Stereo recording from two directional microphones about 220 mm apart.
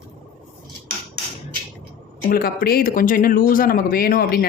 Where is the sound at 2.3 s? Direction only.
40° left (ahead or behind).